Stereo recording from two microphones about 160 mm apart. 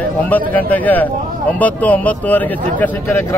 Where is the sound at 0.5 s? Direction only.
10° left (ahead or behind).